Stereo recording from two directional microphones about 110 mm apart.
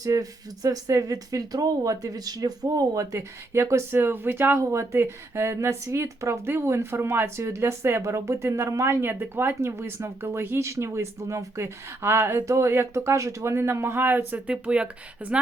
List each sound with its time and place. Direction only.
0.0 s speech: 30° right (ahead or behind); by 15.4 s 10° right (ahead or behind)